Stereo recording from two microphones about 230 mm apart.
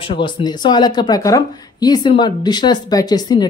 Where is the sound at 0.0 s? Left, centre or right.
Left.